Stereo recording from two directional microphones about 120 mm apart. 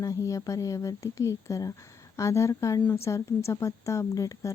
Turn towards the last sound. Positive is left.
turn(degrees=30)  # may be behind; listen again after turning